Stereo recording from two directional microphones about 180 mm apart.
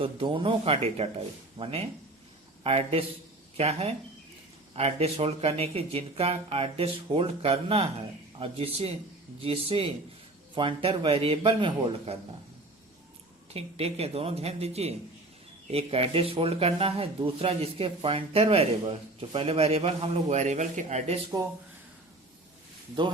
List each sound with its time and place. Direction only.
0.0 s a man's voice: 30° right (ahead or behind)
13.5 s speech: 35° right (ahead or behind)
21.4 s a man's voice: 20° right (ahead or behind)